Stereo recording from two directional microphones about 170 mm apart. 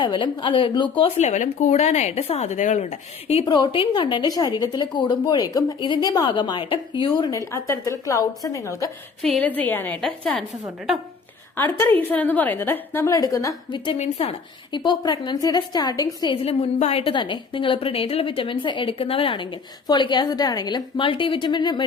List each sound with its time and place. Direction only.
0.0 s speech: 25° left (ahead or behind)
9.2 s a woman's voice: 5° left (ahead or behind); by 13.9 s 25° left (ahead or behind)
13.9 s a woman's voice: 40° left (ahead or behind)
14.8 s speech: 25° left (ahead or behind)
16.3 s a woman's voice: 35° left (ahead or behind)